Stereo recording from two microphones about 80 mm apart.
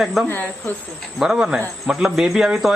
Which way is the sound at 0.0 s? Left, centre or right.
Centre.